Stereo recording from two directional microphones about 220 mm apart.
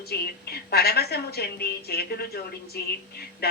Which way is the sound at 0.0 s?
45° left (ahead or behind).